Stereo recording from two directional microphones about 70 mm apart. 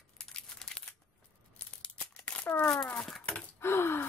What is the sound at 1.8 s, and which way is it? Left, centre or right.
Tearing, centre.